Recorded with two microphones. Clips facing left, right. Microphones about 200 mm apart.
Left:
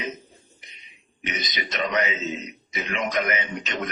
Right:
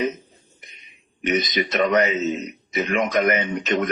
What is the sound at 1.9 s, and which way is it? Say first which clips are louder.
A man's voice: right 7 dB; 50° right (ahead or behind).